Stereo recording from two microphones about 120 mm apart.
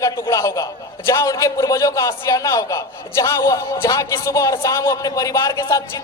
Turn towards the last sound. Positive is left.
turn(degrees=25)  # may be behind; listen again after turning